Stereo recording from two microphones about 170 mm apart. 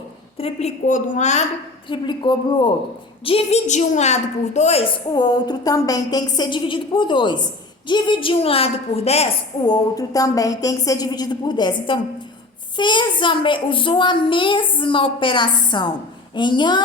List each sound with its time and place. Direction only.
0.3 s a woman's voice: 35° left (ahead or behind)
0.9 s a woman's voice: 50° left (ahead or behind)
1.9 s a woman's voice: 25° left (ahead or behind)
5.1 s a woman's voice: 25° left (ahead or behind)
9.6 s a woman's voice: 20° left (ahead or behind)